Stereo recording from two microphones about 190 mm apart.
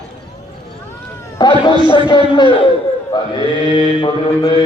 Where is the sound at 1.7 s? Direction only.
25° left (ahead or behind).